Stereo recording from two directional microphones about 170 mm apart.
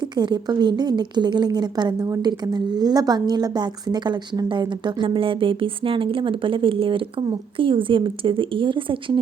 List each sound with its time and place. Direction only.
0.2 s a woman's voice: 25° right (ahead or behind)